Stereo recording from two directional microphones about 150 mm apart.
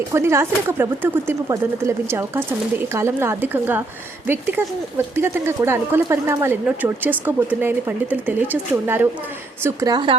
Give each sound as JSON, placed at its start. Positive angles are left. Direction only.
{"t": 0.1, "sound": "speech", "side_deg": -20}
{"t": 9.6, "sound": "speech", "side_deg": -25}